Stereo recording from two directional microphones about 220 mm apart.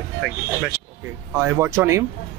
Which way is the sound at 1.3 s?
10° right (ahead or behind).